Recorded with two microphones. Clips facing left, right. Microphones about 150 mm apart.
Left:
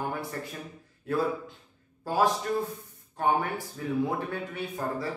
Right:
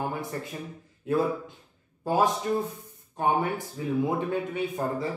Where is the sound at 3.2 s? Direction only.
20° right (ahead or behind).